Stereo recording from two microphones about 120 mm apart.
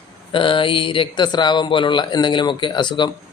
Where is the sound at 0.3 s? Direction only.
45° left (ahead or behind).